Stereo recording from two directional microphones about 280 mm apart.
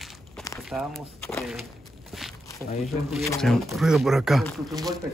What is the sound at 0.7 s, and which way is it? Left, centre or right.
Speech, centre.